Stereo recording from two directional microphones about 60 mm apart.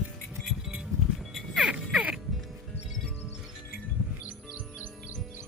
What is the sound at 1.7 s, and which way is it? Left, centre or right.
Music, centre.